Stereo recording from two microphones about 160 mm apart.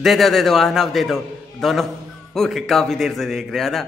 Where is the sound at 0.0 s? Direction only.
Centre (ahead or behind).